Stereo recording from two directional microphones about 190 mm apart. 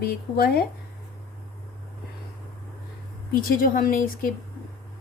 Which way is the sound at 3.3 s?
50° left (ahead or behind).